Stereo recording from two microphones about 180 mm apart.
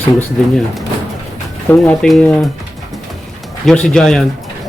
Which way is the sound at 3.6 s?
5° left (ahead or behind).